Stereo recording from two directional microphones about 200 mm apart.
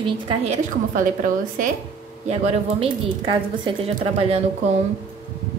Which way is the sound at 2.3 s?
30° right (ahead or behind).